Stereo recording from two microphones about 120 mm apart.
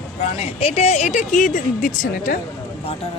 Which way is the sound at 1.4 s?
90° left.